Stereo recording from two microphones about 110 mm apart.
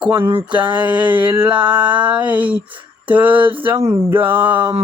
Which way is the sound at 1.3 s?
15° right (ahead or behind).